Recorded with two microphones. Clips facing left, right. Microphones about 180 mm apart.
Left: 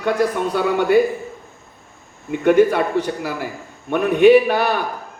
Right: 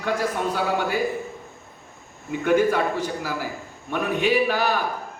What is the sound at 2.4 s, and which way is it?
A man's voice, 60° left (ahead or behind).